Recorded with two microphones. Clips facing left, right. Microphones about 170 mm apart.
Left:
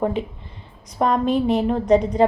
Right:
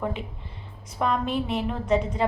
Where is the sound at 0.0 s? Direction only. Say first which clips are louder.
Left 8 dB; 35° left (ahead or behind).